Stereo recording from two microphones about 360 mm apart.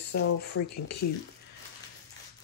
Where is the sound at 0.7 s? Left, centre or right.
Left.